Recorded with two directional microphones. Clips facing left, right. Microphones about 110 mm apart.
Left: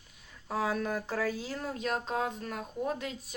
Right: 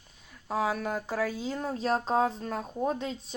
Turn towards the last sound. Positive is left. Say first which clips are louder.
# right 4 dB
turn(degrees=-25)  # may be behind; listen again after turning